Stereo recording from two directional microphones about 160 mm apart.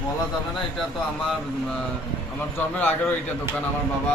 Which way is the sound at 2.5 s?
10° left (ahead or behind).